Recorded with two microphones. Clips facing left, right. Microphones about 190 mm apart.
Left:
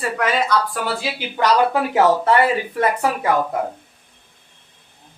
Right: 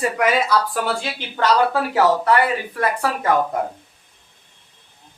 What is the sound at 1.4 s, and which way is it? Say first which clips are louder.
Speech: left 1 dB; 20° left (ahead or behind).